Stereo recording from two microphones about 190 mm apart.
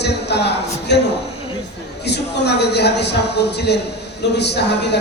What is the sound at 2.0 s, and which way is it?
A man's voice, 60° left (ahead or behind).